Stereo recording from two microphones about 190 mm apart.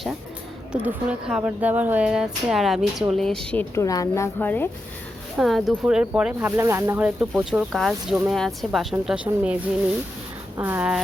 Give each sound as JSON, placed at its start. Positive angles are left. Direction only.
{"t": 0.7, "sound": "speech", "side_deg": -5}
{"t": 5.4, "sound": "speech", "side_deg": 0}